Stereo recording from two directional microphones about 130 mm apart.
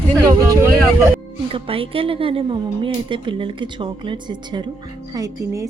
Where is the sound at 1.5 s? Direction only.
45° right (ahead or behind).